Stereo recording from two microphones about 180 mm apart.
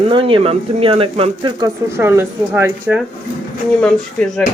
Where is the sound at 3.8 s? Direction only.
5° left (ahead or behind).